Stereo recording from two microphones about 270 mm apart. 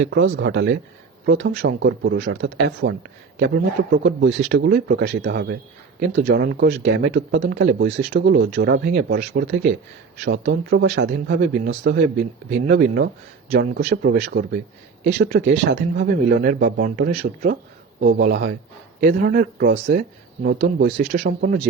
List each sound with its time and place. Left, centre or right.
0.0 s speech: right